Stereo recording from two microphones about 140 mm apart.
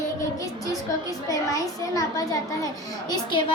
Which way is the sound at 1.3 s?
25° left (ahead or behind).